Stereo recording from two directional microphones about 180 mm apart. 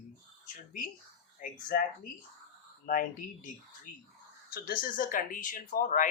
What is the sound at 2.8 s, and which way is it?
Speech, 50° left (ahead or behind).